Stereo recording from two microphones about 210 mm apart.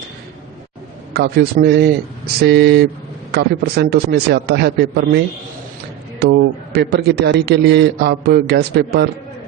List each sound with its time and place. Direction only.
1.1 s a man's voice: 50° right (ahead or behind)
6.7 s a man's voice: 50° right (ahead or behind)